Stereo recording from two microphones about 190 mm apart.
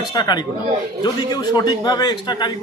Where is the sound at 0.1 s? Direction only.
20° left (ahead or behind).